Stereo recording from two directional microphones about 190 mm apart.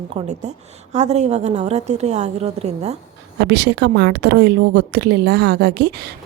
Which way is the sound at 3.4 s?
60° right (ahead or behind).